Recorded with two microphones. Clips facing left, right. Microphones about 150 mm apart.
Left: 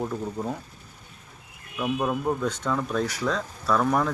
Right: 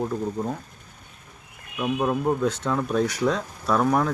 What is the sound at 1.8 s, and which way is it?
Speech, 10° right (ahead or behind).